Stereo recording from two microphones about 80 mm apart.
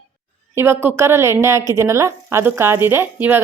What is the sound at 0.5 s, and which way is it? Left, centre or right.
A woman's voice, right.